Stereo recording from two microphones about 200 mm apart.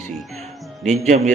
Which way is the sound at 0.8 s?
35° right (ahead or behind).